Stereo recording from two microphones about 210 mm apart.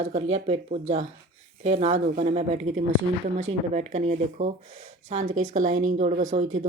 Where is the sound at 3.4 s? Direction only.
30° right (ahead or behind).